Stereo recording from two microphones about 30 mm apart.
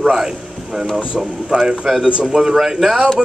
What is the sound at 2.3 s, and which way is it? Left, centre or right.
Speech, centre.